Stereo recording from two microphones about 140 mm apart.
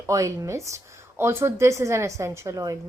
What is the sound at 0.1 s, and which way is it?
A woman's voice, 25° right (ahead or behind).